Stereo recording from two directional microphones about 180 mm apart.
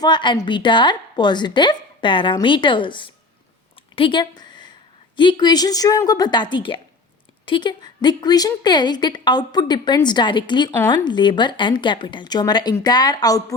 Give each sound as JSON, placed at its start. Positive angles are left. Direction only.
{"t": 0.0, "sound": "a woman's voice", "side_deg": 25}
{"t": 3.9, "sound": "a sound", "side_deg": 25}
{"t": 5.1, "sound": "a woman's voice", "side_deg": 25}